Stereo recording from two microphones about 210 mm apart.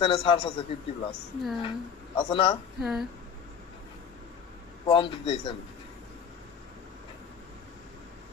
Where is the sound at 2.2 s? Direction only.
25° left (ahead or behind).